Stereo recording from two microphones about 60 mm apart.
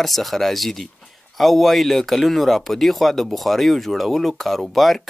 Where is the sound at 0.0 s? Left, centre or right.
Centre.